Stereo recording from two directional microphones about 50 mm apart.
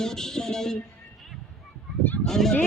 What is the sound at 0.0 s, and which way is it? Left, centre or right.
Speech, centre.